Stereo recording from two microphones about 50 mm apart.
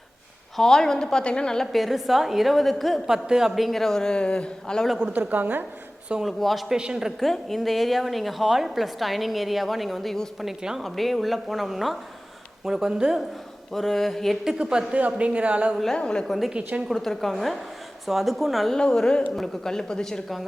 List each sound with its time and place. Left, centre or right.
0.5 s a man's voice: centre
1.7 s a woman's voice: centre
3.1 s speech: centre
3.5 s a man's voice: centre
5.1 s a woman's voice: right
6.2 s a woman's voice: centre
6.7 s speech: centre
7.2 s a woman's voice: centre
13.7 s a woman's voice: centre
14.6 s speech: centre
14.9 s a woman's voice: right
16.0 s a man's voice: centre
16.2 s a woman's voice: centre
18.8 s a man's voice: centre